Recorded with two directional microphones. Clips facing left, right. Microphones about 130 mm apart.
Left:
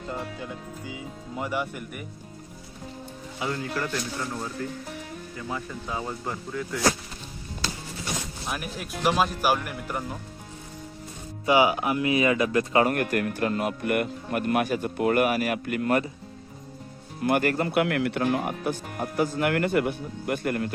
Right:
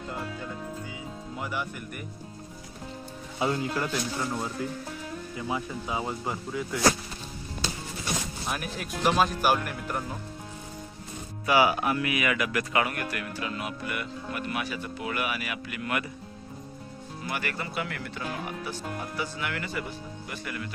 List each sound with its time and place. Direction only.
1.4 s speech: centre (ahead or behind)
3.3 s speech: 25° right (ahead or behind); by 6.7 s 5° right (ahead or behind)
8.4 s speech: centre (ahead or behind)
11.4 s speech: 20° left (ahead or behind)
12.9 s speech: 50° left (ahead or behind)
17.2 s speech: 50° left (ahead or behind)
17.7 s speech: 65° left (ahead or behind)